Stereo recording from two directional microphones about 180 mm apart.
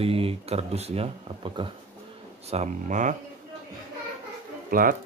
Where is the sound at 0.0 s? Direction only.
30° right (ahead or behind).